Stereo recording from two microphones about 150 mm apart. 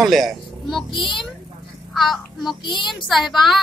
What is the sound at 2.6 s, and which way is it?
Speech, 30° left (ahead or behind).